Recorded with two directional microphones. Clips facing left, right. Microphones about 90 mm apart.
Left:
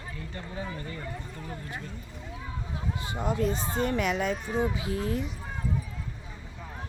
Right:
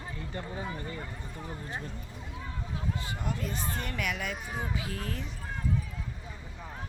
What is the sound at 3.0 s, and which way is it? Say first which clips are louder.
Speech: left 7 dB; 30° left (ahead or behind).